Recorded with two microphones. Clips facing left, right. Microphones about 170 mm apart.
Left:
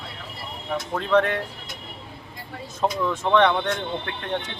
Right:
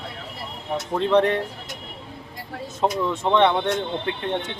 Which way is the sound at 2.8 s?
20° right (ahead or behind).